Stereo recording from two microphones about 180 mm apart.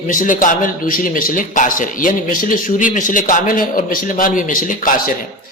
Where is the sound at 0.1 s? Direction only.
45° left (ahead or behind).